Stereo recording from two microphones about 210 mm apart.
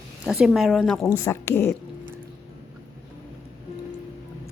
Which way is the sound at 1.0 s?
15° left (ahead or behind).